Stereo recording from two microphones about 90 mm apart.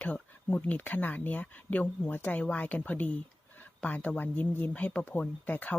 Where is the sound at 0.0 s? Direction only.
20° left (ahead or behind).